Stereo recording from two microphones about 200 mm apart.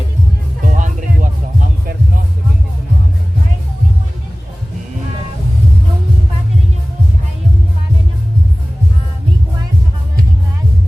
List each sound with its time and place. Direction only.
0.6 s music: 40° right (ahead or behind)